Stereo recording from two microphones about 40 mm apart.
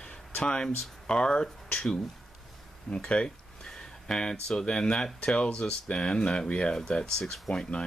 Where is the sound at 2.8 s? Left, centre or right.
Left.